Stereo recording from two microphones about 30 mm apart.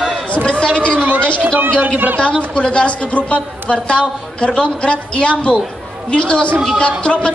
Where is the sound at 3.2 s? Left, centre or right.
Left.